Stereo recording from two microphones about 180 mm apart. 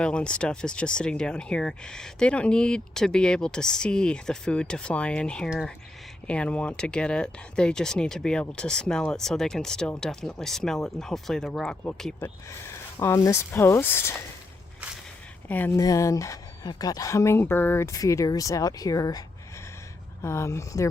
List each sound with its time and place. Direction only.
0.0 s speech: 5° left (ahead or behind)
12.2 s speech: 15° left (ahead or behind)
15.4 s speech: 10° left (ahead or behind)
20.2 s speech: 15° left (ahead or behind)